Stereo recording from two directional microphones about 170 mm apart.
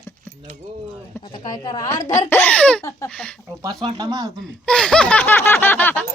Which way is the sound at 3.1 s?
5° left (ahead or behind).